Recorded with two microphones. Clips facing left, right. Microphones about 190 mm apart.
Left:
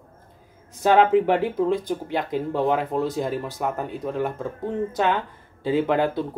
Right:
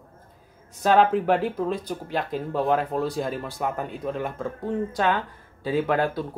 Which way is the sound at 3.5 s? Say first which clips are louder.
Left 1 dB; centre (ahead or behind).